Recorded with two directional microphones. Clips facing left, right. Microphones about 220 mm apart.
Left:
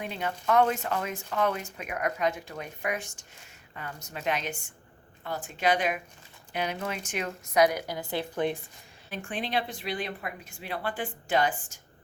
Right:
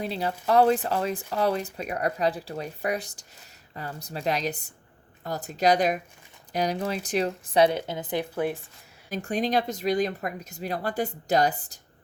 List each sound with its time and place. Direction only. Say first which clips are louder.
0.0 s speech: right 4 dB; 35° right (ahead or behind); by 8.5 s 10° right (ahead or behind)
9.0 s speech: right 7 dB; 40° right (ahead or behind)